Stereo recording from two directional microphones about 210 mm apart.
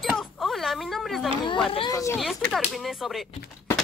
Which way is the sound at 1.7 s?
20° left (ahead or behind).